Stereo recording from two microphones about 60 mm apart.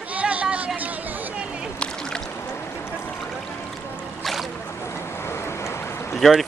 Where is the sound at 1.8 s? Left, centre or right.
Centre.